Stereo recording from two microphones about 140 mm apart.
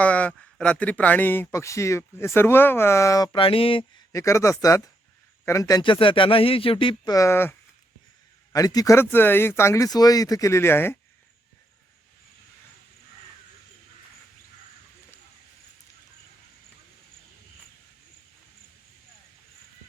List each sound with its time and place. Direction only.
0.0 s speech: 10° left (ahead or behind)
3.3 s speech: 40° left (ahead or behind)
4.1 s speech: 20° left (ahead or behind)
5.8 s speech: 35° left (ahead or behind)
7.1 s speech: 20° left (ahead or behind)
8.5 s speech: 25° left (ahead or behind)